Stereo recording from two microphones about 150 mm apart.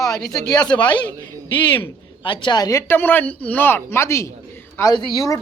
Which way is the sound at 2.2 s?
35° left (ahead or behind).